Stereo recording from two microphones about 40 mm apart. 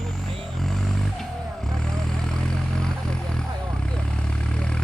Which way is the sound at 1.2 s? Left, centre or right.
Centre.